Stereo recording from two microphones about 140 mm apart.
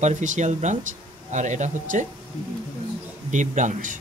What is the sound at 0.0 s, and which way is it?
Speech, 60° right (ahead or behind).